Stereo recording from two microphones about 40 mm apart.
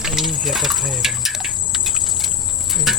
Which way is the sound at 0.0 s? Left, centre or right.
Centre.